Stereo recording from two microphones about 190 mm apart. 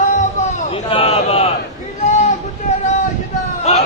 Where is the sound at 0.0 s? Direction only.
40° left (ahead or behind).